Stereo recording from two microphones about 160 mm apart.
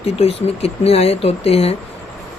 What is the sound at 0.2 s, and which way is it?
Speech, 40° left (ahead or behind).